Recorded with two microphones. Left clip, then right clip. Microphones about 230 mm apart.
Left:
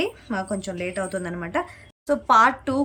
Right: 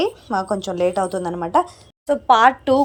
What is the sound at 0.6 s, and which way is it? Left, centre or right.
Speech, right.